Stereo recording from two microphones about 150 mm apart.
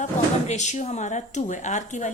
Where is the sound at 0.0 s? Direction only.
50° left (ahead or behind).